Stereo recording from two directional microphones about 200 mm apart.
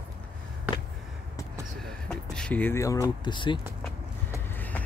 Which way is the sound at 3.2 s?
25° left (ahead or behind).